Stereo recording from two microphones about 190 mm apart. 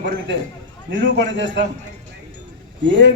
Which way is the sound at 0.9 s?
70° right (ahead or behind).